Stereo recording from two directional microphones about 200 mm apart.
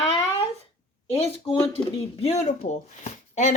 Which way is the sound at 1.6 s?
30° left (ahead or behind).